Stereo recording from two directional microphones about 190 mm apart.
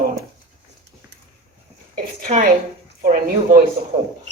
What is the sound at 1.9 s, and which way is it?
A woman's voice, 40° right (ahead or behind).